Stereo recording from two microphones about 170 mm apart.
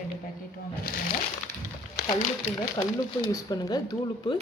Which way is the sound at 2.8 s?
25° left (ahead or behind).